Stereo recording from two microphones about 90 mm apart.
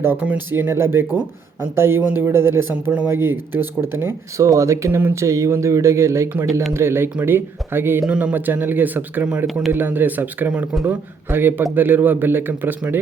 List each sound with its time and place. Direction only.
0.0 s a man's voice: 20° right (ahead or behind)
4.4 s speech: 35° right (ahead or behind)
6.5 s speech: centre (ahead or behind)
6.7 s a man's voice: 25° right (ahead or behind)
8.0 s speech: 10° right (ahead or behind)
8.3 s a man's voice: 20° right (ahead or behind)
9.5 s speech: centre (ahead or behind)
9.7 s a man's voice: 20° right (ahead or behind)